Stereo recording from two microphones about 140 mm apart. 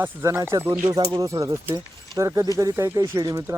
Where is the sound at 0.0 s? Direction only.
20° right (ahead or behind).